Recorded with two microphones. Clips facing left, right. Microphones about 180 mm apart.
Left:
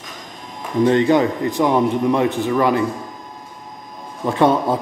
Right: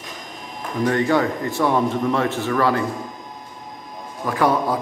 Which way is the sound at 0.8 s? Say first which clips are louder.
Left 4 dB; 20° left (ahead or behind).